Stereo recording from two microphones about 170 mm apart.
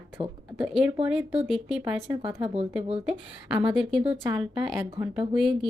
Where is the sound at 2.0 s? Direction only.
30° right (ahead or behind).